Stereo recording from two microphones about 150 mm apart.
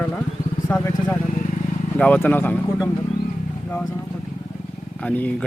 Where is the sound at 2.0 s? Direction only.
10° left (ahead or behind).